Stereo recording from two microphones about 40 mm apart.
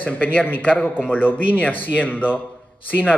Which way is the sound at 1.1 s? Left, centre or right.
Left.